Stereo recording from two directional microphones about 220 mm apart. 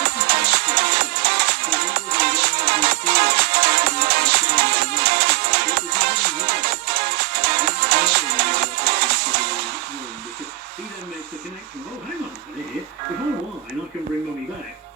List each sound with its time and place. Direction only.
0.0 s music: 45° right (ahead or behind)